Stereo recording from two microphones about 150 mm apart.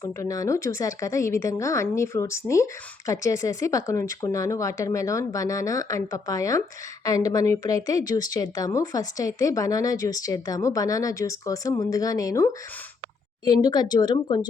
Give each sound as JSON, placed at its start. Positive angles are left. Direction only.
{"t": 0.2, "sound": "a woman's voice", "side_deg": 20}